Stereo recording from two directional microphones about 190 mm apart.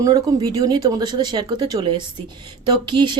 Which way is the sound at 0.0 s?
20° right (ahead or behind).